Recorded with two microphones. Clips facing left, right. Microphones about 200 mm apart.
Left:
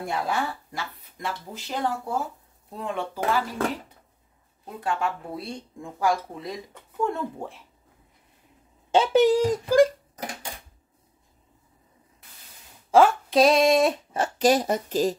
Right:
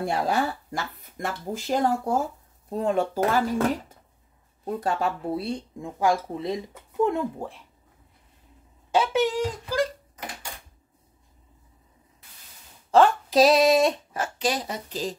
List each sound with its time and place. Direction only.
0.0 s speech: 35° right (ahead or behind)
4.6 s speech: 40° right (ahead or behind); by 6.5 s 20° right (ahead or behind)
7.0 s a sound: 20° right (ahead or behind)
7.3 s speech: centre (ahead or behind)
8.9 s a child's voice: 30° left (ahead or behind)
12.9 s speech: 5° left (ahead or behind)
14.4 s speech: 45° left (ahead or behind)